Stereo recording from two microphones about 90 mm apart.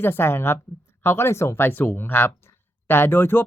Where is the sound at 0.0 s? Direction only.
25° left (ahead or behind).